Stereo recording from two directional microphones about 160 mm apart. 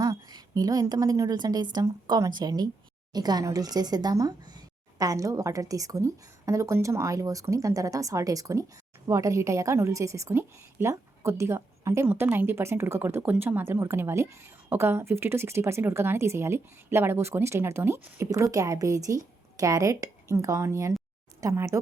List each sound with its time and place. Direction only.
0.0 s a woman's voice: 25° right (ahead or behind)